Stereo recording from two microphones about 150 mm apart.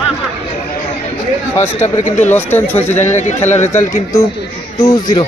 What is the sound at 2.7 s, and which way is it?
Speech, 15° left (ahead or behind).